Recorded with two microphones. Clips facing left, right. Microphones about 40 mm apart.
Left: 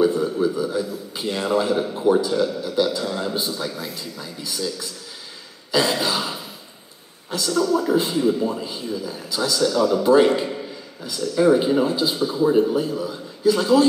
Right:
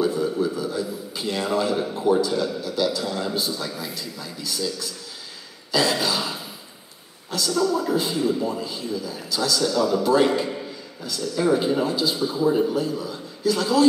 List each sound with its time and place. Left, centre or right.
0.0 s a man's voice: centre
5.7 s a man's voice: left